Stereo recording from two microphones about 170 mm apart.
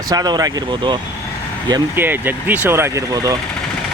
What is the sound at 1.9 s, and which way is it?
Speech, 10° right (ahead or behind).